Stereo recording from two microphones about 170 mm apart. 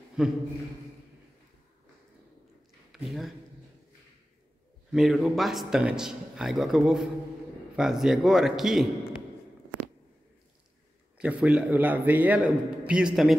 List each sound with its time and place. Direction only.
0.2 s a man's voice: 5° right (ahead or behind)
2.9 s speech: centre (ahead or behind)
4.9 s a man's voice: centre (ahead or behind)
11.1 s a man's voice: 10° right (ahead or behind)